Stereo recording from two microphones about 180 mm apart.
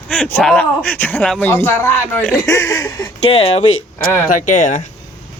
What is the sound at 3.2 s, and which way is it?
Speech, 35° left (ahead or behind).